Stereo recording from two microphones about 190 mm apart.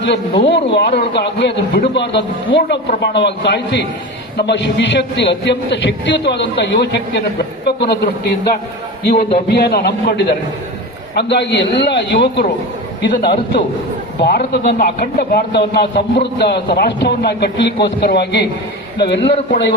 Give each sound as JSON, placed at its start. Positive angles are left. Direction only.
{"t": 0.0, "sound": "a man's voice", "side_deg": 65}
{"t": 9.5, "sound": "a man's voice", "side_deg": 60}
{"t": 14.2, "sound": "a man's voice", "side_deg": 60}